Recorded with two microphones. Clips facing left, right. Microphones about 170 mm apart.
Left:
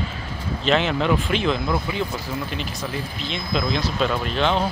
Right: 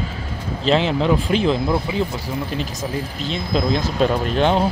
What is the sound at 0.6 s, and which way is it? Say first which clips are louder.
Speech: right 3 dB; 30° right (ahead or behind).